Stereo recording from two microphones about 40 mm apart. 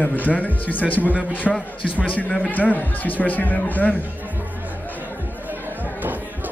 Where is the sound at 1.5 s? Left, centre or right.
Centre.